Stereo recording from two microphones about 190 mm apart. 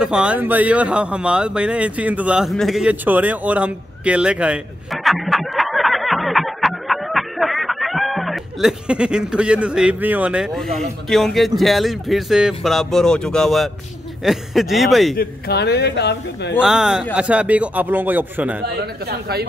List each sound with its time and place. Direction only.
0.0 s a man's voice: 5° right (ahead or behind)
15.1 s a man's voice: 55° left (ahead or behind)
16.5 s a man's voice: 5° right (ahead or behind)
19.0 s speech: 55° right (ahead or behind)